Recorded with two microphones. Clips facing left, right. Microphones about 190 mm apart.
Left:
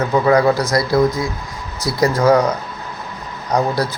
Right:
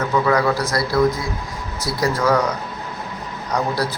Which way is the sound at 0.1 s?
35° left (ahead or behind).